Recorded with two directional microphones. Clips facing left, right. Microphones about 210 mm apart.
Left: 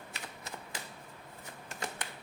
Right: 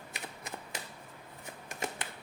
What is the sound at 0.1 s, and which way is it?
Typewriter, 15° right (ahead or behind).